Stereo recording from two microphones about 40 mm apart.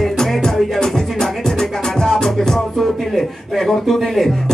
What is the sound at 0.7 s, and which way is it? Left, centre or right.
Music, centre.